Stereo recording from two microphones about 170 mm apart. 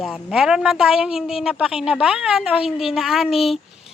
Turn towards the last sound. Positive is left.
turn(degrees=0)  # may be behind; listen again after turning